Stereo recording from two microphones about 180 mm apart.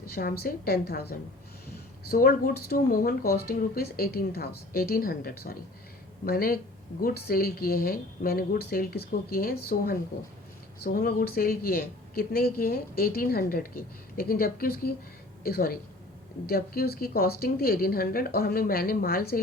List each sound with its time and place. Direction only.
0.1 s a woman's voice: 55° left (ahead or behind)